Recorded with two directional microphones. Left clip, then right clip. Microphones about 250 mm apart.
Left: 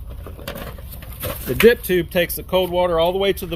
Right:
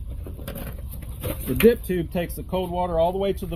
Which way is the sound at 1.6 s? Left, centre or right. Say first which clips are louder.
Left 5 dB; left.